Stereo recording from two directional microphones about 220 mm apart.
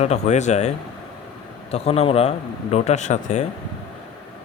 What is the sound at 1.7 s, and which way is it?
A man's voice, 25° left (ahead or behind).